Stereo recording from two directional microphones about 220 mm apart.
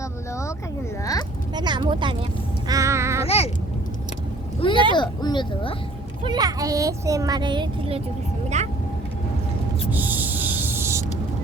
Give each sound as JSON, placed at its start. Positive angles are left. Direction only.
{"t": 1.5, "sound": "speech", "side_deg": -20}
{"t": 2.6, "sound": "music", "side_deg": -15}
{"t": 3.2, "sound": "babbling", "side_deg": 25}
{"t": 4.6, "sound": "vehicle", "side_deg": 25}
{"t": 4.9, "sound": "speech", "side_deg": 20}
{"t": 6.2, "sound": "speech", "side_deg": -20}
{"t": 9.9, "sound": "a sound", "side_deg": -10}